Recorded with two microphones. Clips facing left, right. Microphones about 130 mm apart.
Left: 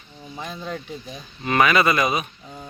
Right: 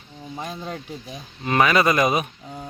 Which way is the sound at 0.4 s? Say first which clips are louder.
Left 2 dB; 35° right (ahead or behind).